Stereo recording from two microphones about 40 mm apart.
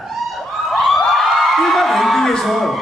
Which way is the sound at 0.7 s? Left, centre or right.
Centre.